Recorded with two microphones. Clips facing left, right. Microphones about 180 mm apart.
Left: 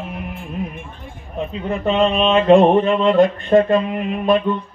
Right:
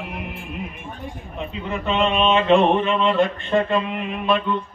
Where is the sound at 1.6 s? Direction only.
35° left (ahead or behind).